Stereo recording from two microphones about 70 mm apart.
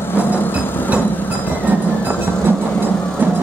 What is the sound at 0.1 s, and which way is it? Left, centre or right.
Vehicle, left.